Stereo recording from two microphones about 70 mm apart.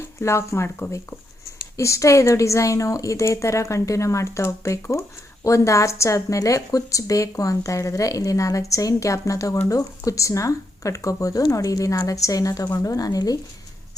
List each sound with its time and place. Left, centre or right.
0.0 s a woman's voice: left
12.8 s a woman's voice: left